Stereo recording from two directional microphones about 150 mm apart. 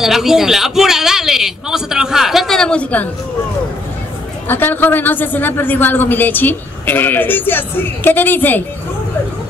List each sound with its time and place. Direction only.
0.0 s a man's voice: centre (ahead or behind)
4.5 s a man's voice: 15° left (ahead or behind)